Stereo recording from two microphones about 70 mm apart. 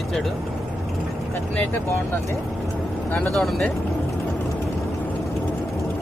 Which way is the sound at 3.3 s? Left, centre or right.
Centre.